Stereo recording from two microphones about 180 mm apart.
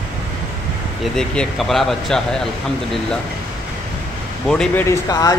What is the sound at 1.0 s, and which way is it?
Speech, 5° left (ahead or behind).